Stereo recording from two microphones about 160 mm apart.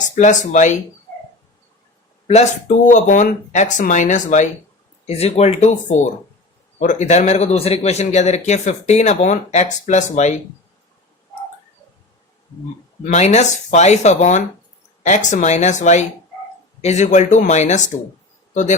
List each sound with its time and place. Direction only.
0.2 s a man's voice: 50° left (ahead or behind)
2.2 s a man's voice: 45° left (ahead or behind)
13.1 s a man's voice: 45° left (ahead or behind)